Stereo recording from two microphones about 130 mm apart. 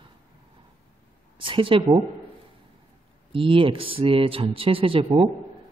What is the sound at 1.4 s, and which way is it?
Speech, 40° right (ahead or behind).